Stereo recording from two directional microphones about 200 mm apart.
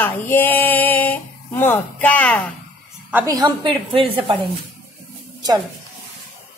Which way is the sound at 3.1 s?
15° right (ahead or behind).